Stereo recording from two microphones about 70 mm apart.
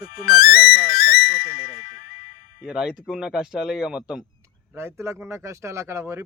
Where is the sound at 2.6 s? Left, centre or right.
Centre.